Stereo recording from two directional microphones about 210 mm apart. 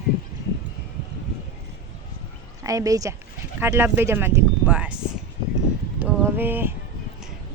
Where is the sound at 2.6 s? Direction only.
15° right (ahead or behind).